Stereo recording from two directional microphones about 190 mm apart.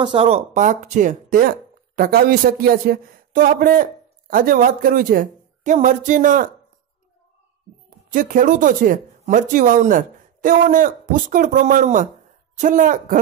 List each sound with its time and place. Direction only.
0.0 s speech: 30° right (ahead or behind); by 6.5 s 45° right (ahead or behind)
8.1 s speech: 45° right (ahead or behind)